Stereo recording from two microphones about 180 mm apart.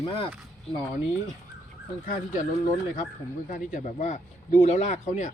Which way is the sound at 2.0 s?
50° left (ahead or behind).